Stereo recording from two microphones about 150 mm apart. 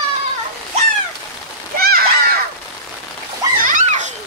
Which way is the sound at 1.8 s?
90° right.